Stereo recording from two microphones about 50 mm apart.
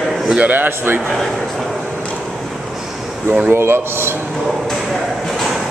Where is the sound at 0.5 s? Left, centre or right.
Right.